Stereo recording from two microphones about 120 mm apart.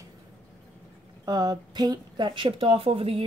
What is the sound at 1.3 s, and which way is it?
Speech, 35° right (ahead or behind).